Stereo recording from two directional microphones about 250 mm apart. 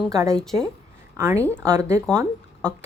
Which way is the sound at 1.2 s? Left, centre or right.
Centre.